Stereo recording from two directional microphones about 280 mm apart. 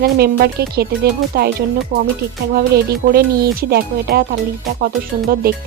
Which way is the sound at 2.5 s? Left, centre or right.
Right.